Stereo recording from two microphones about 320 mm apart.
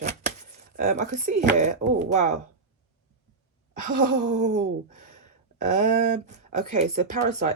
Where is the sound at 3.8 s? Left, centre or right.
Right.